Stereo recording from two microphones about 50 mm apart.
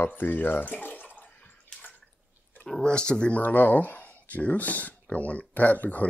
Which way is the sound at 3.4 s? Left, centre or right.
Left.